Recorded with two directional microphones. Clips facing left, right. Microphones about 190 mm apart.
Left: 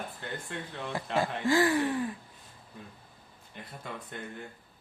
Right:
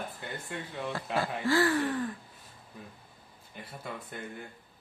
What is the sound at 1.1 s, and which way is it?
Speech, 15° left (ahead or behind).